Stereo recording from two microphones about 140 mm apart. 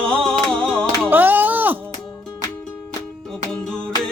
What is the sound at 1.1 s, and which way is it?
Chop, 15° right (ahead or behind).